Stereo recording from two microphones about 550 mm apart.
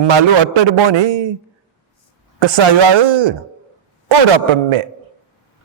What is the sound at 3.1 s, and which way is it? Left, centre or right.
Speech, right.